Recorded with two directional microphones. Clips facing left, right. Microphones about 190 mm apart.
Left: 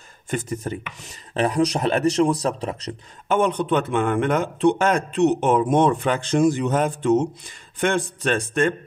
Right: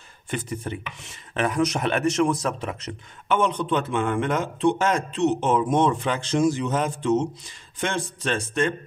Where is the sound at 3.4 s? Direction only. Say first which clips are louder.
Left 4 dB; 55° left (ahead or behind).